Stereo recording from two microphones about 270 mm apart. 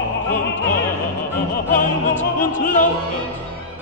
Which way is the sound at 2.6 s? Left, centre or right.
Left.